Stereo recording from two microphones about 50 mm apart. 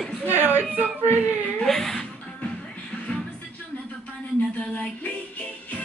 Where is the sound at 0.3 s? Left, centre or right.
Right.